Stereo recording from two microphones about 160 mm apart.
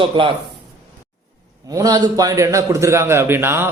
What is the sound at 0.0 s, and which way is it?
Speech, 30° right (ahead or behind).